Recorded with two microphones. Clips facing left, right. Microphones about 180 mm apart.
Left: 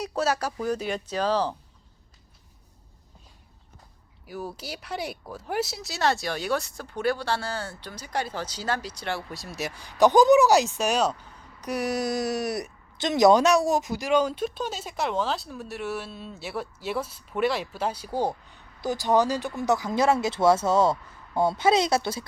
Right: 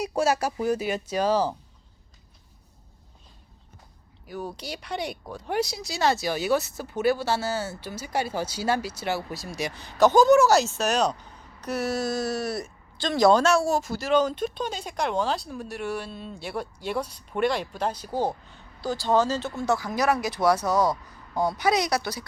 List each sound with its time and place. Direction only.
0.0 s speech: 10° right (ahead or behind)
4.3 s speech: 5° left (ahead or behind); by 22.2 s 25° left (ahead or behind)